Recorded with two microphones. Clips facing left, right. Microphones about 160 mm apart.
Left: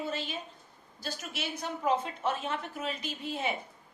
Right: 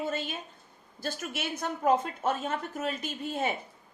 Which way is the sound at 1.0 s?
50° right (ahead or behind).